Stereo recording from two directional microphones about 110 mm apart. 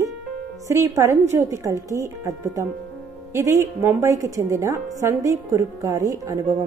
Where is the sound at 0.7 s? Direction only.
30° right (ahead or behind).